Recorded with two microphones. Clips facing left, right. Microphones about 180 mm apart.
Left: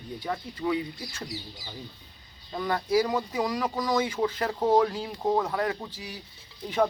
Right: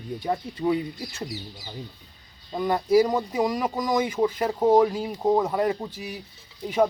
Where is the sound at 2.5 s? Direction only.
20° right (ahead or behind).